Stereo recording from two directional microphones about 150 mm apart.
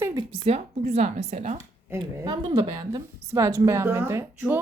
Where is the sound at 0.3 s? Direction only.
35° right (ahead or behind).